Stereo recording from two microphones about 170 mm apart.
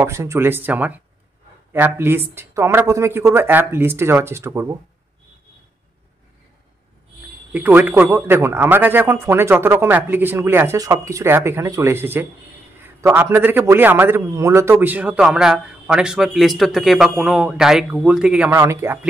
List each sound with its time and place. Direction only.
0.0 s a man's voice: 15° right (ahead or behind)
7.5 s a man's voice: 10° right (ahead or behind)